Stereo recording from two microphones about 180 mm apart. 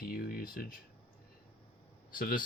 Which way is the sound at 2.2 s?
50° left (ahead or behind).